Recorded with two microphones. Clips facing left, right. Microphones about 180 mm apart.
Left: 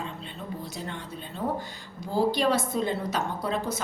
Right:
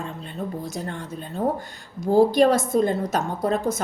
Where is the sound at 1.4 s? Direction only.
45° right (ahead or behind).